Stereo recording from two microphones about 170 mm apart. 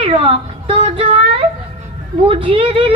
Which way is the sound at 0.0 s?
35° right (ahead or behind).